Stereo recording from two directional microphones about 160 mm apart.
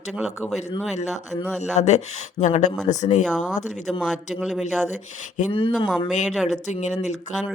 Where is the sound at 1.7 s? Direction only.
45° left (ahead or behind).